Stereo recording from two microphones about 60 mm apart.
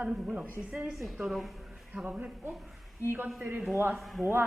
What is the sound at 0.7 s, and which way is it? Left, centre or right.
Speech, centre.